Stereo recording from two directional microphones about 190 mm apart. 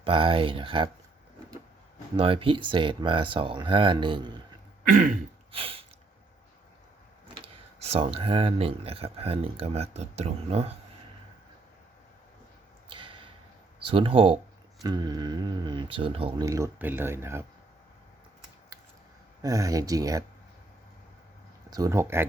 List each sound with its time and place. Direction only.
0.0 s speech: 30° right (ahead or behind)
2.1 s speech: 30° right (ahead or behind)
4.9 s throat clearing: 45° right (ahead or behind)
5.5 s a sound: 30° right (ahead or behind)
7.4 s speech: 30° right (ahead or behind)
12.9 s a sound: 25° right (ahead or behind)
13.8 s speech: 30° right (ahead or behind)
16.5 s speech: 15° right (ahead or behind)
19.4 s speech: 20° right (ahead or behind)
21.7 s speech: 15° right (ahead or behind)